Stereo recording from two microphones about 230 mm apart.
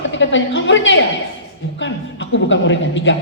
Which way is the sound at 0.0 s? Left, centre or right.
Left.